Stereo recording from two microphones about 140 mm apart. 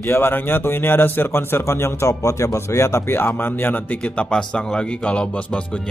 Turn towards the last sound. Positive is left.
turn(degrees=10)  # may be behind; listen again after turning